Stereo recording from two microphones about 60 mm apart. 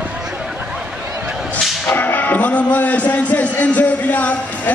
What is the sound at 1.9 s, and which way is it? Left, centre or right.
A man's voice, left.